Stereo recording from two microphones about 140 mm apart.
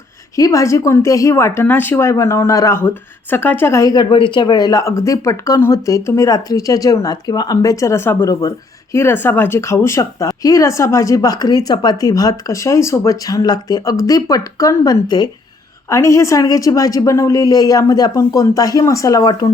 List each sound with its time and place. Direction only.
0.3 s speech: 25° left (ahead or behind)
4.1 s speech: 35° left (ahead or behind)